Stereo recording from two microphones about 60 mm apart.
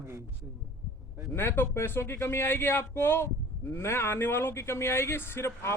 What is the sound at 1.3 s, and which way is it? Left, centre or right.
Speech, left.